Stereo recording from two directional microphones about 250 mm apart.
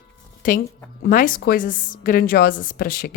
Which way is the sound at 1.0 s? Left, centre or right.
Left.